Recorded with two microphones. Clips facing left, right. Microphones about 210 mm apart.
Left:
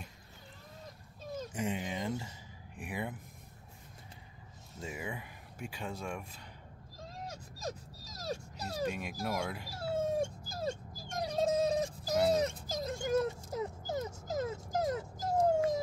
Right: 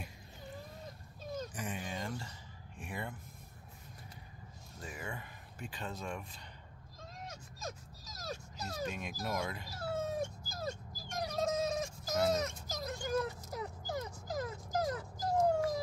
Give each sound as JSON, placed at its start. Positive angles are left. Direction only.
{"t": 1.5, "sound": "a sound", "side_deg": 25}
{"t": 2.8, "sound": "speech", "side_deg": 15}
{"t": 4.9, "sound": "a sound", "side_deg": 10}
{"t": 7.2, "sound": "dog", "side_deg": 35}
{"t": 8.8, "sound": "speech", "side_deg": 5}
{"t": 9.8, "sound": "dog", "side_deg": 30}